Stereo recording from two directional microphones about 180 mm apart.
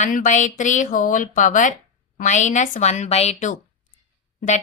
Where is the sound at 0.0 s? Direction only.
45° left (ahead or behind).